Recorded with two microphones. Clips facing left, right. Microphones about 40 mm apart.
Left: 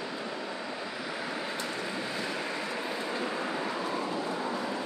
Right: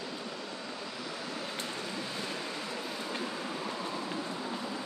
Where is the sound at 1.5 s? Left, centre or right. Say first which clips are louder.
Left 4 dB; left.